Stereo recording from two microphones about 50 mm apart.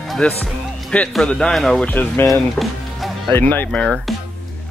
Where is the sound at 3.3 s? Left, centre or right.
Left.